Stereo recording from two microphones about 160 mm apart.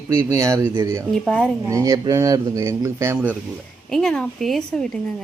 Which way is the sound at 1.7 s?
20° right (ahead or behind).